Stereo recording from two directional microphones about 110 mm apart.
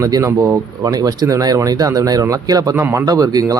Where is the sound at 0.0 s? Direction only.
30° right (ahead or behind).